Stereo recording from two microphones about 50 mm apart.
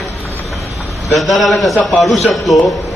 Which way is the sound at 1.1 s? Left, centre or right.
Centre.